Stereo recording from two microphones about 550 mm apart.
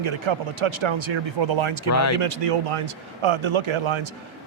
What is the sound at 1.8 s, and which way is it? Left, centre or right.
Speech, left.